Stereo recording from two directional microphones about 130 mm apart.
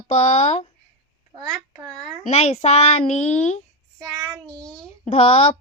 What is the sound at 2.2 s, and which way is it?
A child's voice, 55° left (ahead or behind).